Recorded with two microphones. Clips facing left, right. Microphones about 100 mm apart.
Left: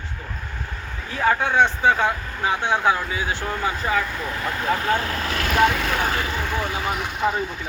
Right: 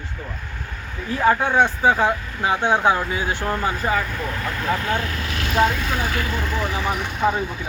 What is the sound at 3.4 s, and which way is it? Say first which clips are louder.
Speech: right 2 dB; 35° right (ahead or behind).